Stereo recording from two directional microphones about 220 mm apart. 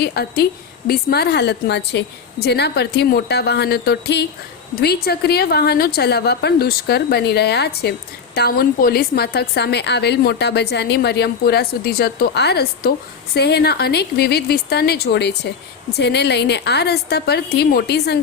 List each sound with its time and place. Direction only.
0.0 s a woman's voice: 45° left (ahead or behind)